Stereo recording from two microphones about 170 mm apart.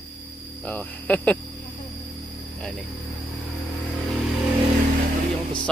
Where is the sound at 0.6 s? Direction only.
10° left (ahead or behind).